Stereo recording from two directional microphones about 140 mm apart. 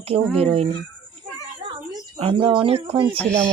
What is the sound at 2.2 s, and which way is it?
Speech, 40° right (ahead or behind).